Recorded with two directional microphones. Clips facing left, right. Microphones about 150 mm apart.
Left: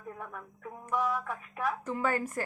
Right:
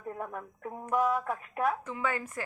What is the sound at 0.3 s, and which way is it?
Speech, 45° right (ahead or behind).